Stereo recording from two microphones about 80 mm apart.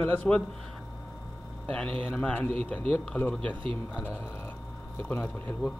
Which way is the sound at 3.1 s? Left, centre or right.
Left.